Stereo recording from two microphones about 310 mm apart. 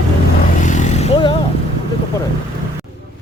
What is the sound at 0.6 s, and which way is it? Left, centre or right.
Vehicle, left.